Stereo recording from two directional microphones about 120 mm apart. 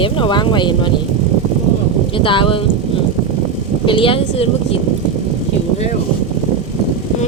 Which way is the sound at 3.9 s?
45° left (ahead or behind).